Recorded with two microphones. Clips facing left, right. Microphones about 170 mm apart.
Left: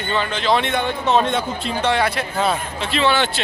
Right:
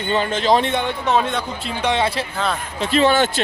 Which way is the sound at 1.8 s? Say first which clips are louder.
Even; 25° right (ahead or behind).